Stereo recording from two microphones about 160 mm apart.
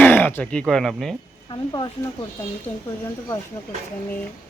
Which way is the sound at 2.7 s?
10° left (ahead or behind).